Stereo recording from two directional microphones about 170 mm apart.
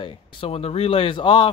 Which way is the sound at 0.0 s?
30° left (ahead or behind).